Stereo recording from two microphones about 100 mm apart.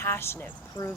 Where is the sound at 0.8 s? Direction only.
35° left (ahead or behind).